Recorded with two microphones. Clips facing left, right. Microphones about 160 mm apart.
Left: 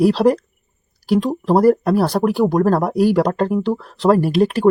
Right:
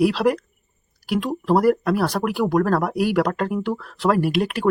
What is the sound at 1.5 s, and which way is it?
Speech, 35° left (ahead or behind).